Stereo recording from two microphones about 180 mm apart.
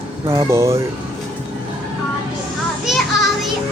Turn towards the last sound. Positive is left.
turn(degrees=0)  # may be behind; listen again after turning